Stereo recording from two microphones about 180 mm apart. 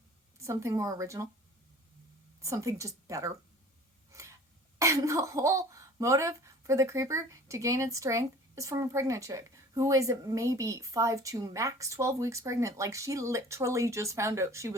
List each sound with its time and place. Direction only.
0.3 s speech: 15° right (ahead or behind)
2.4 s speech: 15° right (ahead or behind)
4.1 s a sound: 15° right (ahead or behind)
4.8 s speech: 15° right (ahead or behind)